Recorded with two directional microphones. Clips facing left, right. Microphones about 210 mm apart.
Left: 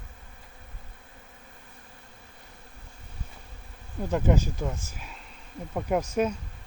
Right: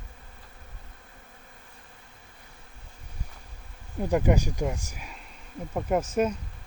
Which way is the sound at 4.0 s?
15° right (ahead or behind).